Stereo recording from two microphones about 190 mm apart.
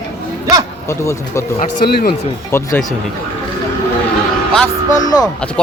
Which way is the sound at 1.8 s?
55° left (ahead or behind).